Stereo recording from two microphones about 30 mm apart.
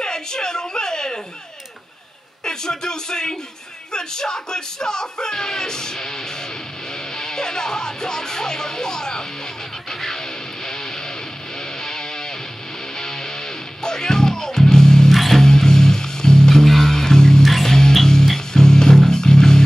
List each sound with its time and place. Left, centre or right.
0.0 s a sound: left
2.4 s a sound: left
3.9 s speech: left
7.2 s music: left
15.0 s music: centre
15.4 s music: left
17.4 s music: centre
18.0 s music: centre